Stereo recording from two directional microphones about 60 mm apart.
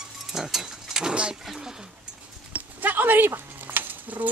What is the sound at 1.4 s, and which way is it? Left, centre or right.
Goat, centre.